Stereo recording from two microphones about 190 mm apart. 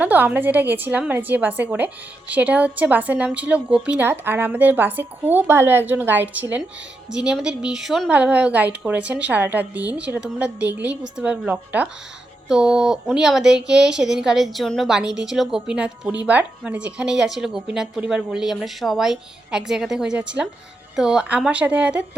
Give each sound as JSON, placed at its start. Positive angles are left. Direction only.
{"t": 0.0, "sound": "a woman's voice", "side_deg": -10}